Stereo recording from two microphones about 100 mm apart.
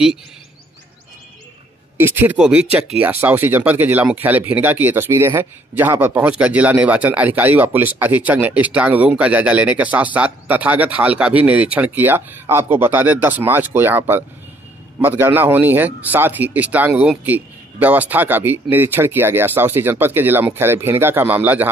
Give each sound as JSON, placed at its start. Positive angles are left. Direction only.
{"t": 2.0, "sound": "a man's voice", "side_deg": -20}
{"t": 2.3, "sound": "speech", "side_deg": -5}
{"t": 3.0, "sound": "a man's voice", "side_deg": -20}